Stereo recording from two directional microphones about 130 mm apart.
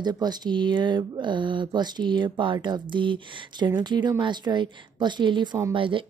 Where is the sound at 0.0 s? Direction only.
35° right (ahead or behind).